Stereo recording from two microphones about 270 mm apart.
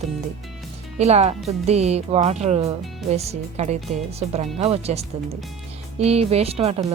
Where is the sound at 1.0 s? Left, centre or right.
Right.